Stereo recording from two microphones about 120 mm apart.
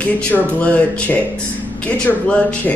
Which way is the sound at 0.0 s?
10° left (ahead or behind).